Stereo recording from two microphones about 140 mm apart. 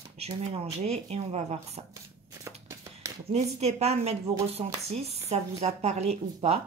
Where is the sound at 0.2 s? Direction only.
50° right (ahead or behind).